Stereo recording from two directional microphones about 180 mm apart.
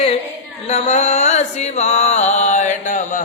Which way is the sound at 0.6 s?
40° left (ahead or behind).